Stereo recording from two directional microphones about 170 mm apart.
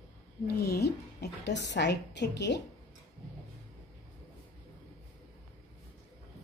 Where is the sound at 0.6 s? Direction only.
70° left (ahead or behind); by 2.6 s 90° left.